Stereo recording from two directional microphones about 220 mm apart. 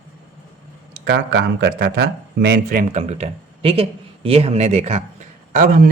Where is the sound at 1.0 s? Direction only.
50° right (ahead or behind).